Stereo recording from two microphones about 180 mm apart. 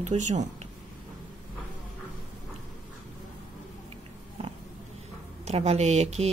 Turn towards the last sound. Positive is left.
turn(degrees=-40)  # may be behind; listen again after turning